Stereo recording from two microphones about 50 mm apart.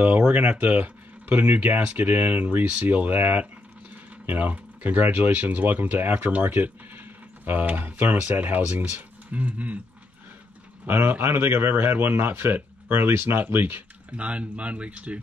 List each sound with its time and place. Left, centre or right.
0.3 s speech: right
2.9 s speech: right
10.9 s a man's voice: right
14.1 s speech: right